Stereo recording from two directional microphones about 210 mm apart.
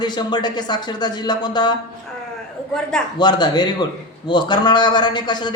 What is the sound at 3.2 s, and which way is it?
Speech, 20° left (ahead or behind).